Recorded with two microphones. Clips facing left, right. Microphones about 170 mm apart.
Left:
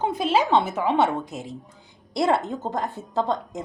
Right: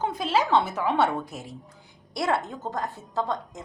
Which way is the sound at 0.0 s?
20° left (ahead or behind).